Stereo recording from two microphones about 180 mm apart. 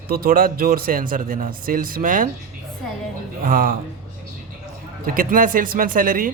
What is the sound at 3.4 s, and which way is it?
Speech, 50° right (ahead or behind).